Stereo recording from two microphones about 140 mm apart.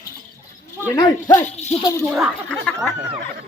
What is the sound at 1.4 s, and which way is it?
Speech, 50° left (ahead or behind).